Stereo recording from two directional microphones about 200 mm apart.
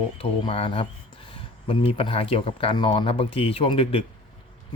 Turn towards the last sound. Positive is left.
turn(degrees=30)  # may be behind; listen again after turning